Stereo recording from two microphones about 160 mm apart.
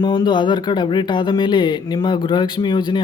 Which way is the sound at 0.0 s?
25° left (ahead or behind).